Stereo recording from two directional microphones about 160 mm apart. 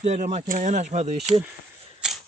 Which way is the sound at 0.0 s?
45° right (ahead or behind).